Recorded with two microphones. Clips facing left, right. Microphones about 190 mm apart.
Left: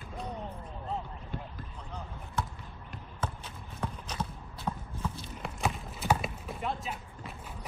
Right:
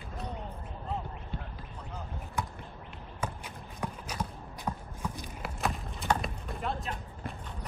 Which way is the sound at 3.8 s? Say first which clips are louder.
Even; 10° right (ahead or behind).